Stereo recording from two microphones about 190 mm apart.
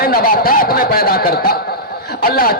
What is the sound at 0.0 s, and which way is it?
A man's voice, 50° left (ahead or behind).